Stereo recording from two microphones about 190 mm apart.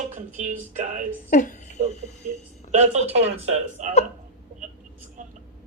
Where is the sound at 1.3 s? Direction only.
45° left (ahead or behind).